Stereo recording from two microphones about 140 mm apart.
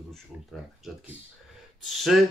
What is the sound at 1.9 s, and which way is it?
Speech, centre (ahead or behind).